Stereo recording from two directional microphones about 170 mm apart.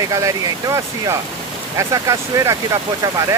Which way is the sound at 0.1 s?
20° right (ahead or behind).